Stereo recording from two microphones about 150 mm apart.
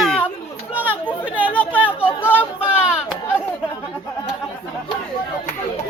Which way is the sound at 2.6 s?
10° right (ahead or behind).